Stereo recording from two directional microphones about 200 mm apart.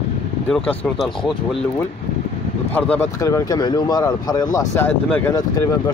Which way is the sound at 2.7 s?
5° left (ahead or behind).